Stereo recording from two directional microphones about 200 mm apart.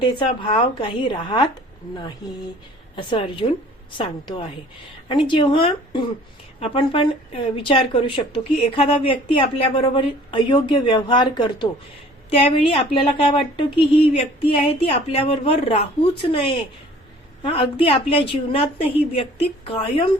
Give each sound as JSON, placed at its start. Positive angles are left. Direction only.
{"t": 0.0, "sound": "a woman's voice", "side_deg": 25}
{"t": 2.9, "sound": "a woman's voice", "side_deg": 30}
{"t": 17.4, "sound": "a woman's voice", "side_deg": 25}